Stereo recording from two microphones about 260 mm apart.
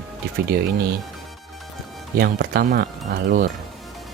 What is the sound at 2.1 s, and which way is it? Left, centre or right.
Speech, right.